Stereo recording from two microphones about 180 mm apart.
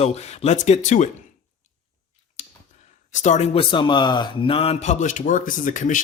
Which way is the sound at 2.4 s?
40° left (ahead or behind).